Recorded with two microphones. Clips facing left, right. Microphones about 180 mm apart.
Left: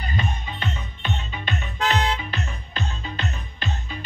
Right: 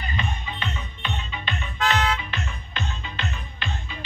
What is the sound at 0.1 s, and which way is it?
Music, 40° left (ahead or behind).